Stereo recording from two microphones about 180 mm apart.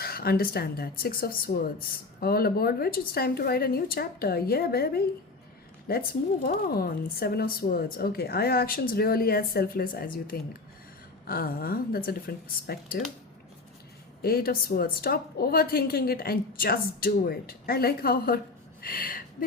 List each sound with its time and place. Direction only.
0.0 s a woman's voice: 55° left (ahead or behind)
14.2 s a woman's voice: 60° left (ahead or behind)